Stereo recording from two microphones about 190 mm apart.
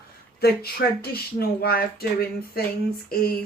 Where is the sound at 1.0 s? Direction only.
55° left (ahead or behind).